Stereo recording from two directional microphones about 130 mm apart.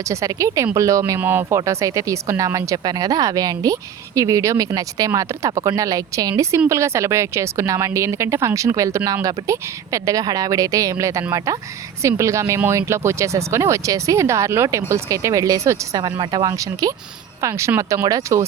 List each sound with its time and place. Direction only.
0.1 s speech: 25° right (ahead or behind)